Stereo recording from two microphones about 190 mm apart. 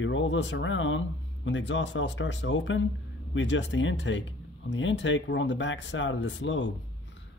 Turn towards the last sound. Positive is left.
turn(degrees=75)  # may be behind; listen again after turning